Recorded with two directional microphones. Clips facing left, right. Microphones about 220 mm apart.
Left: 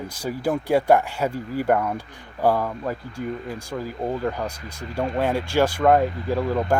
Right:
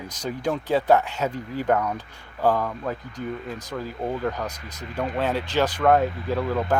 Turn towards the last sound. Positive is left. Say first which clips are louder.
# left 2 dB
turn(degrees=10)  # may be behind; listen again after turning